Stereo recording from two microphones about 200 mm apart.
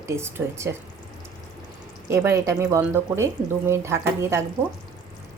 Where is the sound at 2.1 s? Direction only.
10° right (ahead or behind).